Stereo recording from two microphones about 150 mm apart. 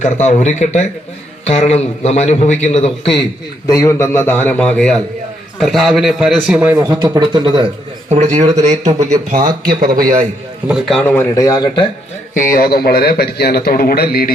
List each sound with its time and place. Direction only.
0.0 s a man's voice: 50° left (ahead or behind)
3.7 s a man's voice: 20° left (ahead or behind); by 6.6 s 5° right (ahead or behind)
7.0 s speech: 30° right (ahead or behind)
8.1 s a man's voice: 45° right (ahead or behind)
9.6 s speech: 75° right (ahead or behind)
10.7 s a man's voice: 5° right (ahead or behind)
10.9 s speech: 15° left (ahead or behind); by 11.9 s 30° left (ahead or behind)
12.3 s a man's voice: 65° left (ahead or behind); by 14.3 s 85° left